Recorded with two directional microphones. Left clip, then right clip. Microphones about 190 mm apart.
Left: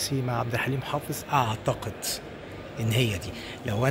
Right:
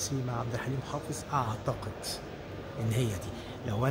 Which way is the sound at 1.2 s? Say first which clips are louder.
Left 7 dB; 35° left (ahead or behind).